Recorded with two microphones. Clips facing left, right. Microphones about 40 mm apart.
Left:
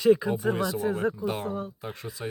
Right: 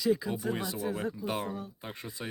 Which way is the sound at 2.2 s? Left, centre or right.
Centre.